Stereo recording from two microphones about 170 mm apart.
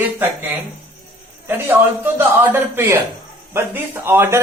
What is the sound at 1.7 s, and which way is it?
A man's voice, 10° right (ahead or behind).